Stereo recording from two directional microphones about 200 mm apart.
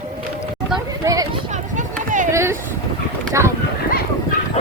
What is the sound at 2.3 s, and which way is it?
Vehicle, 15° right (ahead or behind).